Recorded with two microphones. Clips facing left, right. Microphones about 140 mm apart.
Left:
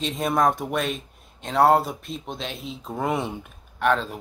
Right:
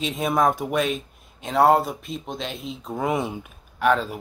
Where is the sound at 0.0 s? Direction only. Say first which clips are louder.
Right 1 dB; centre (ahead or behind).